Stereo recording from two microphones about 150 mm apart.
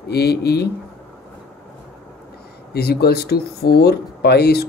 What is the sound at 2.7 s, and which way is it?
Speech, 90° left.